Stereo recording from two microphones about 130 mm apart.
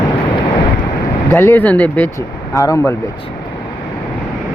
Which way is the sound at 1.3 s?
20° left (ahead or behind).